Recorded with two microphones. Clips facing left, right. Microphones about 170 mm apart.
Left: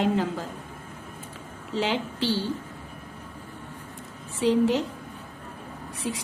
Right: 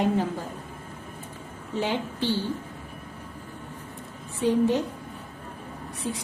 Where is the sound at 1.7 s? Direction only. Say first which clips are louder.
Left 1 dB; 85° left.